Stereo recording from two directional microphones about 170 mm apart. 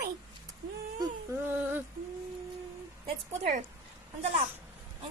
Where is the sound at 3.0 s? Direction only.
45° right (ahead or behind).